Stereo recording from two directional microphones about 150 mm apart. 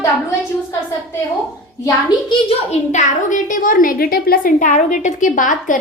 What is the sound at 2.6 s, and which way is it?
A woman's voice, 55° left (ahead or behind).